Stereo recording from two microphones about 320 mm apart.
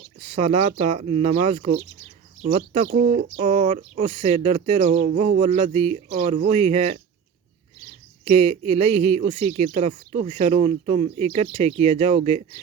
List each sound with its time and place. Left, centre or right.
0.2 s speech: centre